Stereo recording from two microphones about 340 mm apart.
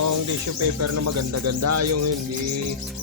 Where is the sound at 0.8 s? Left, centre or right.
Right.